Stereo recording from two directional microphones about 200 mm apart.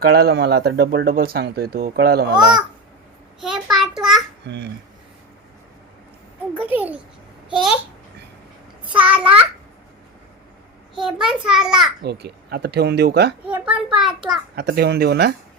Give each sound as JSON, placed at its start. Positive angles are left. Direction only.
{"t": 0.1, "sound": "speech", "side_deg": -50}
{"t": 2.3, "sound": "a child's voice", "side_deg": -20}
{"t": 3.4, "sound": "a sound", "side_deg": 0}
{"t": 4.4, "sound": "speech", "side_deg": -55}
{"t": 6.7, "sound": "a child's voice", "side_deg": -10}
{"t": 9.0, "sound": "a child's voice", "side_deg": -5}
{"t": 10.9, "sound": "a child's voice", "side_deg": 0}
{"t": 12.0, "sound": "speech", "side_deg": -55}
{"t": 13.5, "sound": "a child's voice", "side_deg": -5}
{"t": 14.5, "sound": "speech", "side_deg": -55}